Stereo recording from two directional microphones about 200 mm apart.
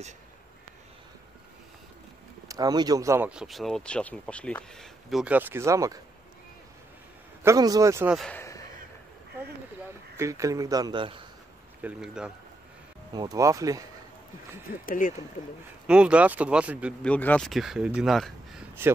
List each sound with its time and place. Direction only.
2.4 s speech: 20° right (ahead or behind)
7.4 s speech: 20° right (ahead or behind)
8.2 s a sound: 10° left (ahead or behind)
10.1 s speech: 15° right (ahead or behind)
11.8 s speech: 5° right (ahead or behind)
13.1 s speech: 20° right (ahead or behind)
14.9 s speech: 40° left (ahead or behind)
15.9 s speech: 5° right (ahead or behind)
17.0 s speech: 5° left (ahead or behind)